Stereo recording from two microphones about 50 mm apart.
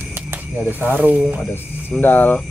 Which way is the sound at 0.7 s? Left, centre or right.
Right.